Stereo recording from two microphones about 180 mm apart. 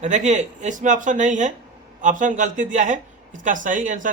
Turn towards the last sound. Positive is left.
turn(degrees=-45)  # may be behind; listen again after turning